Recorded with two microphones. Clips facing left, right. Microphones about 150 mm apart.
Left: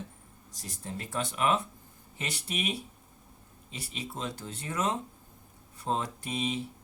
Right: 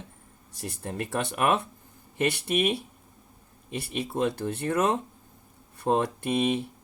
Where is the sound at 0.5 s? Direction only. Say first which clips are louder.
Right 6 dB; 60° right (ahead or behind).